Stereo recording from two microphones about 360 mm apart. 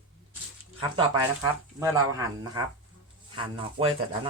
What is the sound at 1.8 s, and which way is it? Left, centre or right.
Speech, centre.